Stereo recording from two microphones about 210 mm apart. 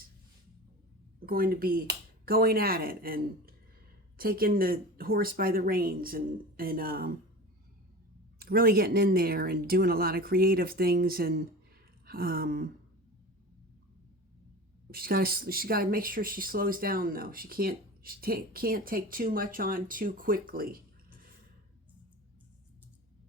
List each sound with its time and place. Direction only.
1.2 s speech: 45° right (ahead or behind)
8.4 s speech: 45° right (ahead or behind)
14.8 s speech: 45° right (ahead or behind)